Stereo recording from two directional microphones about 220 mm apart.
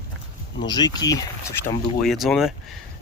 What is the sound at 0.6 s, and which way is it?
Speech, 20° left (ahead or behind).